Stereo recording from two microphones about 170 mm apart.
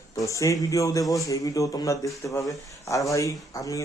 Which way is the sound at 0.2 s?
20° left (ahead or behind).